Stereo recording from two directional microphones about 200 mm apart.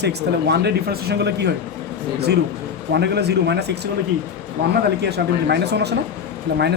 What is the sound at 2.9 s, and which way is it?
Speech, 55° right (ahead or behind).